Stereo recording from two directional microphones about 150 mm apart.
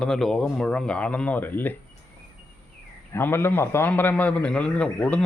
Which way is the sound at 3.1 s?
15° left (ahead or behind).